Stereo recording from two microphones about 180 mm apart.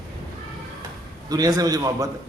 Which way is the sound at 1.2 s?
20° right (ahead or behind).